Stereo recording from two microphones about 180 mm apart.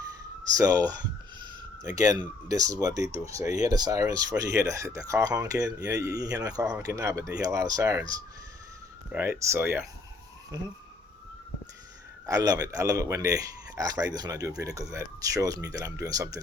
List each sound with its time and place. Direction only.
0.5 s speech: 20° right (ahead or behind)
9.1 s speech: 10° right (ahead or behind)
12.2 s speech: 20° right (ahead or behind)